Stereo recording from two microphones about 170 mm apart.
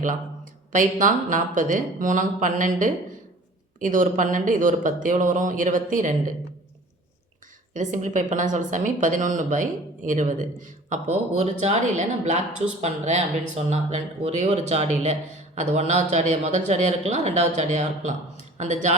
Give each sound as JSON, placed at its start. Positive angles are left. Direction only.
{"t": 0.7, "sound": "speech", "side_deg": -50}
{"t": 7.7, "sound": "speech", "side_deg": -50}